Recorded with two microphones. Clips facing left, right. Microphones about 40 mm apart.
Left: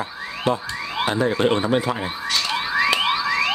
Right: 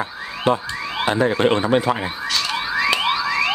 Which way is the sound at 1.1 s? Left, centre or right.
Right.